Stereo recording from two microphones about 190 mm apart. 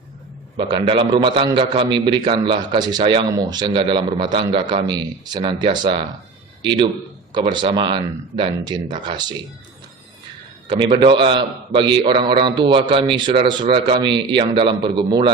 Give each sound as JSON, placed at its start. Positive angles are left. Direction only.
{"t": 0.5, "sound": "a man's voice", "side_deg": -25}
{"t": 10.7, "sound": "a man's voice", "side_deg": -25}